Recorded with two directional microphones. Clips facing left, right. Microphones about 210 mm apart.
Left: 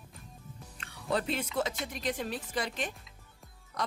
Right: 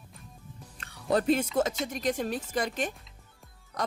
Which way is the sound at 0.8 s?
45° right (ahead or behind).